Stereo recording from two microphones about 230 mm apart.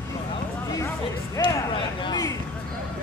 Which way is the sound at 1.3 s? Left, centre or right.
Left.